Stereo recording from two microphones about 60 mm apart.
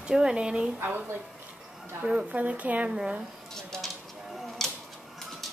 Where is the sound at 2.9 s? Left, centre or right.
Centre.